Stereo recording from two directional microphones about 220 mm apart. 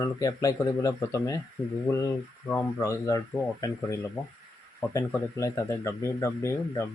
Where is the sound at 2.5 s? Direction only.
15° left (ahead or behind).